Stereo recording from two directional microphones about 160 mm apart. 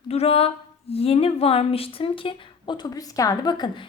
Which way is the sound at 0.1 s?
40° left (ahead or behind).